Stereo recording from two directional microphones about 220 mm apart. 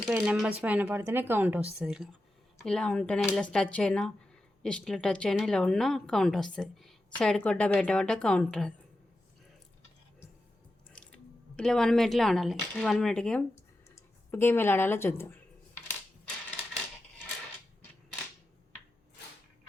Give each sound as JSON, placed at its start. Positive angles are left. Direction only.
{"t": 0.0, "sound": "speech", "side_deg": 0}
{"t": 10.9, "sound": "speech", "side_deg": 5}